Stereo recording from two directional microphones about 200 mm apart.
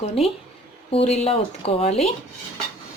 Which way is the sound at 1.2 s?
30° left (ahead or behind).